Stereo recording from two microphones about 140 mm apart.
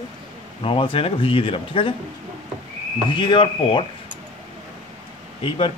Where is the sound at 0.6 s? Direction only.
40° left (ahead or behind).